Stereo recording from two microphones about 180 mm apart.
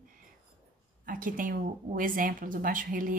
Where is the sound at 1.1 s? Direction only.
50° right (ahead or behind).